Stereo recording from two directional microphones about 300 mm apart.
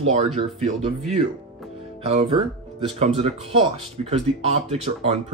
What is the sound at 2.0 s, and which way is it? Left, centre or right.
Speech, right.